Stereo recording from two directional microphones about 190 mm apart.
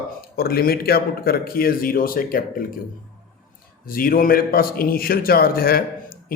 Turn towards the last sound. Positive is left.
turn(degrees=50)  # may be behind; listen again after turning